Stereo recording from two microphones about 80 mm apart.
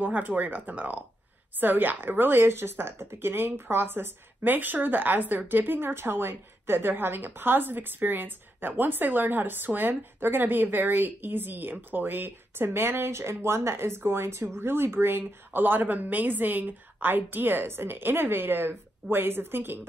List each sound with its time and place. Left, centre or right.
0.0 s a woman's voice: right